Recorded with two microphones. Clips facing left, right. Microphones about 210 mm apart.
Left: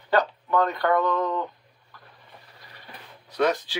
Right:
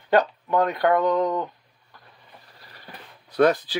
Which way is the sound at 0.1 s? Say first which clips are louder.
Right 2 dB; 20° right (ahead or behind).